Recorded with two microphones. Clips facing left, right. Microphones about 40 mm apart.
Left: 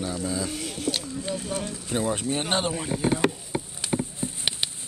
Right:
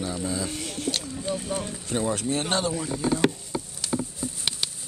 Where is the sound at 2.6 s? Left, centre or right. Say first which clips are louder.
Even; left.